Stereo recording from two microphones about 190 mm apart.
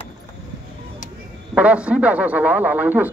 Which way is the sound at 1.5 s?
5° right (ahead or behind).